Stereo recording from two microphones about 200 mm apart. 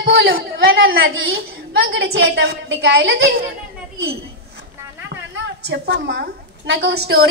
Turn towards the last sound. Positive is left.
turn(degrees=-55)  # may be behind; listen again after turning